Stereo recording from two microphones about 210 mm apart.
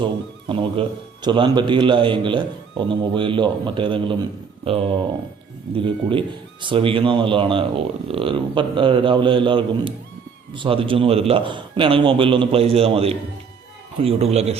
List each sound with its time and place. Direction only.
0.0 s speech: 25° right (ahead or behind)